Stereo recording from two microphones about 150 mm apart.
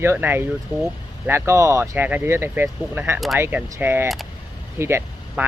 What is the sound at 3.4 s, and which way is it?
Speech, 15° right (ahead or behind).